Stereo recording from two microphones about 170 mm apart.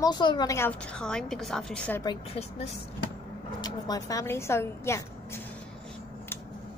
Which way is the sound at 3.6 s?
20° left (ahead or behind).